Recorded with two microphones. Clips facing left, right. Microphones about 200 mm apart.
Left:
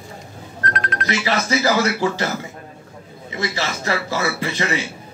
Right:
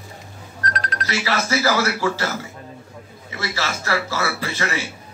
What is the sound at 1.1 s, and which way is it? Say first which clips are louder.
A man's voice: left 2 dB; 20° left (ahead or behind).